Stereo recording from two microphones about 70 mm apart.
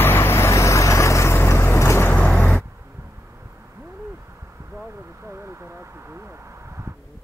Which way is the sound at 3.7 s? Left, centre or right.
Right.